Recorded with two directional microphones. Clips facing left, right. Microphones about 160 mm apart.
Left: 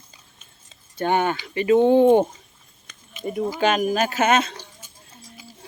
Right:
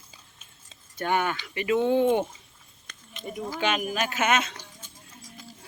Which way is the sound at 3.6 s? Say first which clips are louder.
Left 6 dB; 40° left (ahead or behind).